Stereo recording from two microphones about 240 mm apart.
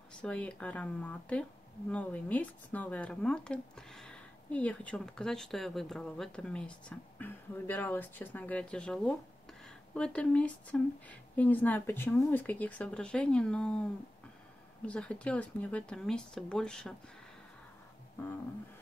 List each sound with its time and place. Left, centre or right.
0.2 s speech: centre
14.9 s speech: centre